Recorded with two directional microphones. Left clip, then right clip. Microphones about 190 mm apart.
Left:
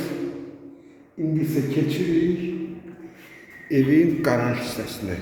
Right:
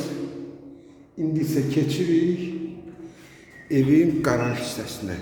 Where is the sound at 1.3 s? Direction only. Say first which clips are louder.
Even; 15° right (ahead or behind).